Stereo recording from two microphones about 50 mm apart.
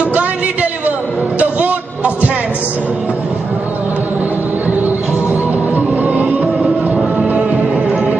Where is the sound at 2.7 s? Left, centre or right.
Right.